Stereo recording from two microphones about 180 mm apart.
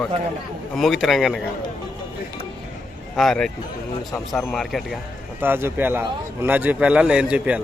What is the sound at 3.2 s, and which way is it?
Speech, centre (ahead or behind).